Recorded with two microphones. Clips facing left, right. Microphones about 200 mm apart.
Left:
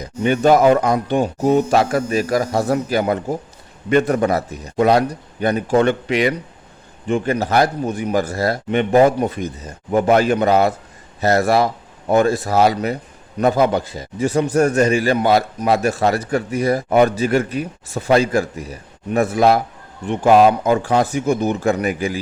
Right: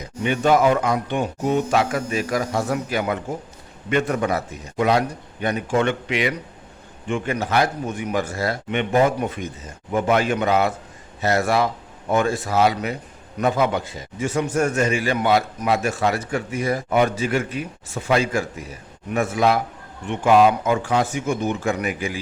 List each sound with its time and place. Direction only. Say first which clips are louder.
0.0 s a man's voice: left 5 dB; 40° left (ahead or behind)